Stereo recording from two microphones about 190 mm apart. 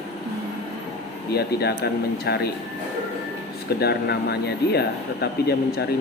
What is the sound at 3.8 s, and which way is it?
Speech, 60° left (ahead or behind).